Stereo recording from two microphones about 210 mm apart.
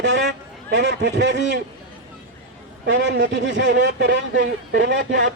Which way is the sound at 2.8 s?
60° right (ahead or behind).